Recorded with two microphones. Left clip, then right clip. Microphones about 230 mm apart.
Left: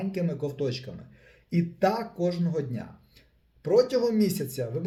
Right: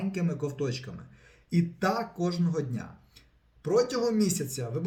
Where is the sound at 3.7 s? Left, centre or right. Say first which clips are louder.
Left 3 dB; centre.